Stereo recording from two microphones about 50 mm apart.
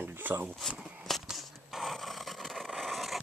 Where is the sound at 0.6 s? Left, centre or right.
Centre.